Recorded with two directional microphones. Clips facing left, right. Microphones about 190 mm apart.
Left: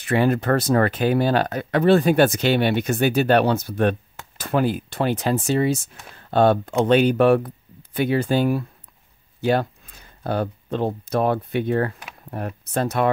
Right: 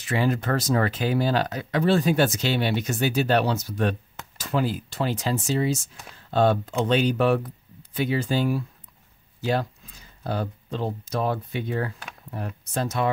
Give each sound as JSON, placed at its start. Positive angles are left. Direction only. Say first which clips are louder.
{"t": 0.0, "sound": "speech", "louder": "left 5 dB", "side_deg": 55}